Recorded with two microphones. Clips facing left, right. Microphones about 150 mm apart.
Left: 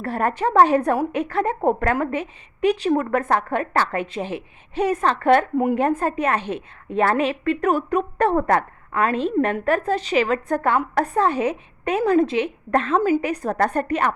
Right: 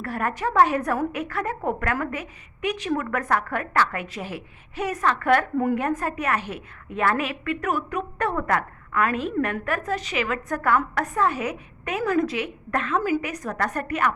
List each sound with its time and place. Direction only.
0.0 s a woman's voice: 30° left (ahead or behind)